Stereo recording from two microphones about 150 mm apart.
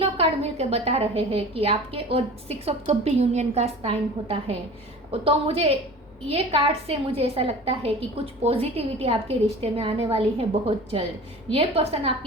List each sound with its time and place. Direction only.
0.0 s a woman's voice: 40° right (ahead or behind)